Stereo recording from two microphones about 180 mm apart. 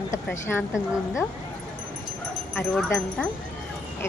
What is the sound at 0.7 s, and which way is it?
Speech, 5° right (ahead or behind).